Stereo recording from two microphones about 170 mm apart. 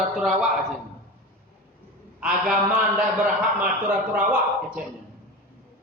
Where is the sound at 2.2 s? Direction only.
5° right (ahead or behind).